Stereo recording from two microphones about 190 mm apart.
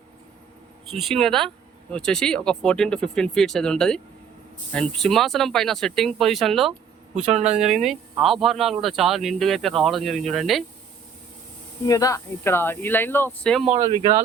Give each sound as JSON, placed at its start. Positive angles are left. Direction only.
{"t": 0.9, "sound": "speech", "side_deg": 0}
{"t": 7.3, "sound": "speech", "side_deg": -35}
{"t": 7.6, "sound": "speech", "side_deg": 0}
{"t": 11.9, "sound": "speech", "side_deg": 20}
{"t": 13.8, "sound": "speech", "side_deg": -30}